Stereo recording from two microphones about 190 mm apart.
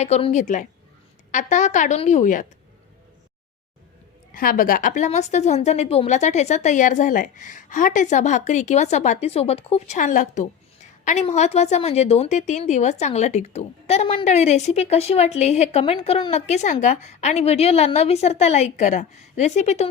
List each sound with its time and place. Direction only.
0.0 s a woman's voice: 35° left (ahead or behind)
4.4 s a woman's voice: 50° left (ahead or behind)